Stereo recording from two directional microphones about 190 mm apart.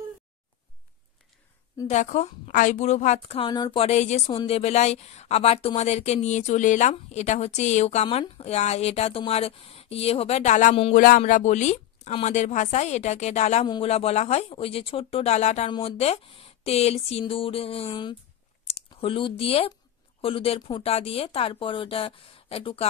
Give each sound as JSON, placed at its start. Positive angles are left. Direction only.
{"t": 1.9, "sound": "a woman's voice", "side_deg": 40}
{"t": 3.8, "sound": "a woman's voice", "side_deg": 35}